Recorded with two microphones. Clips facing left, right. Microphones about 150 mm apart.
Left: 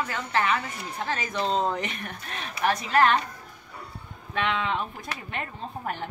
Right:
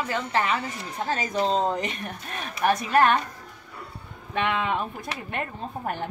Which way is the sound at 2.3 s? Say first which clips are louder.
Right 2 dB; 50° right (ahead or behind).